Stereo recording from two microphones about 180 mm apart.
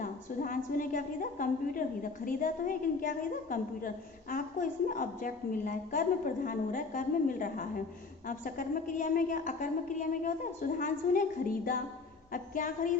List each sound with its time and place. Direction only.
0.0 s a woman's voice: 50° left (ahead or behind)